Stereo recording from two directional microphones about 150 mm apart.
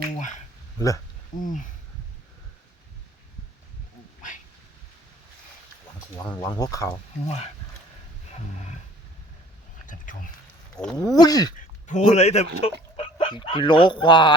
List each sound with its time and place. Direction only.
0.2 s speech: 55° left (ahead or behind)
0.8 s speech: 20° left (ahead or behind)
1.4 s speech: 60° left (ahead or behind)
6.2 s speech: 10° left (ahead or behind)
6.5 s speech: 25° left (ahead or behind)
8.5 s roaring cats: 50° left (ahead or behind)
9.8 s a sound: 60° left (ahead or behind)
10.8 s speech: 5° left (ahead or behind)
11.1 s speech: 25° left (ahead or behind)
11.9 s speech: 50° left (ahead or behind); by 14.3 s 30° left (ahead or behind)